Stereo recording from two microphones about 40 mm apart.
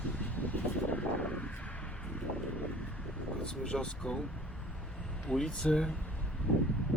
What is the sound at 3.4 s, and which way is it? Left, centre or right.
Speech, left.